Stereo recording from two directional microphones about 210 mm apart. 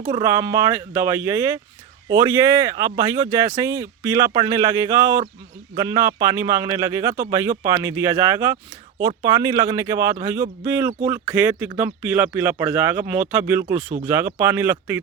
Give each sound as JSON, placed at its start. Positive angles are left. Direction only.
{"t": 0.1, "sound": "speech", "side_deg": -15}